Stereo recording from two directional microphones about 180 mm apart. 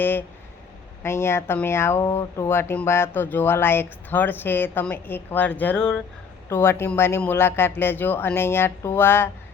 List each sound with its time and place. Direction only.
0.0 s speech: 10° left (ahead or behind)